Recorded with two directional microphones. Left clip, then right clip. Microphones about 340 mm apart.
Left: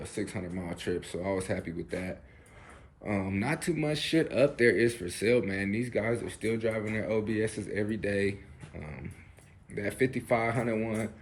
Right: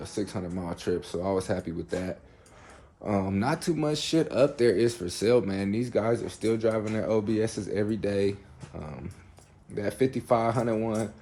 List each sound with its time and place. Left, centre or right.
0.0 s speech: centre
9.7 s speech: centre